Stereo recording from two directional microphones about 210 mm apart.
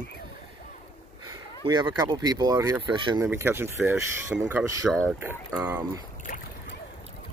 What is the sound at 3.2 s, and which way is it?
Speech, 10° right (ahead or behind).